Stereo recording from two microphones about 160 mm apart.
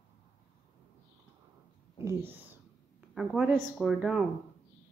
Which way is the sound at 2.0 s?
15° right (ahead or behind).